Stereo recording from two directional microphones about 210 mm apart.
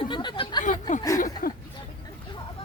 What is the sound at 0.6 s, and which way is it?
Speech, 35° left (ahead or behind).